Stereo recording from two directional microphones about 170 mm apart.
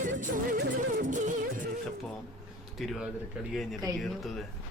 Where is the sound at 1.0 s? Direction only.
50° right (ahead or behind).